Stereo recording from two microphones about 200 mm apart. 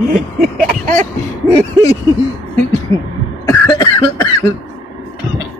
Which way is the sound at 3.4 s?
20° left (ahead or behind).